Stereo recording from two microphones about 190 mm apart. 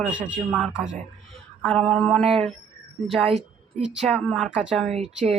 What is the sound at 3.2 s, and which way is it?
Speech, 35° right (ahead or behind).